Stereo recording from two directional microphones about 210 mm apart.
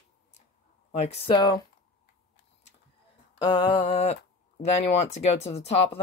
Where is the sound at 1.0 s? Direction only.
30° left (ahead or behind).